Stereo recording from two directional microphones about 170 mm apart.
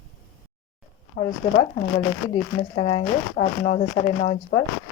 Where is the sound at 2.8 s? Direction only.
30° left (ahead or behind).